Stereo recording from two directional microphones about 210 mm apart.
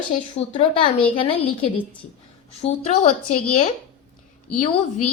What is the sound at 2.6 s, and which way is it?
Speech, 35° left (ahead or behind).